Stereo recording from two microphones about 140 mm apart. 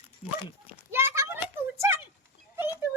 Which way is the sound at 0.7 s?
15° right (ahead or behind).